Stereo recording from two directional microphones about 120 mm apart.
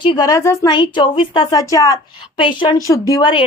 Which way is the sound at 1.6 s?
30° left (ahead or behind).